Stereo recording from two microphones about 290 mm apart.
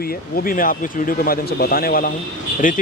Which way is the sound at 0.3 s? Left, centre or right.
Left.